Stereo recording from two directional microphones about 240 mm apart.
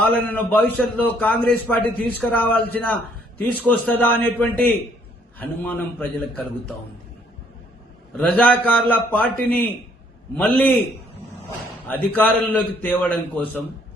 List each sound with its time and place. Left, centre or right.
0.0 s a man's voice: centre
8.1 s a man's voice: centre
10.3 s a man's voice: centre
11.9 s a man's voice: centre